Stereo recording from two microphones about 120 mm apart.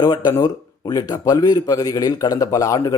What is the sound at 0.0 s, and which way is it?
Speech, 35° left (ahead or behind).